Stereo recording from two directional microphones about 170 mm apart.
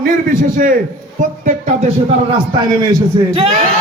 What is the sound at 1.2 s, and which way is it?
Speech, 50° right (ahead or behind).